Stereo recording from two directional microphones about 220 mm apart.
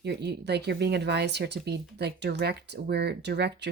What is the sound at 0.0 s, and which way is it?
Speech, 50° right (ahead or behind).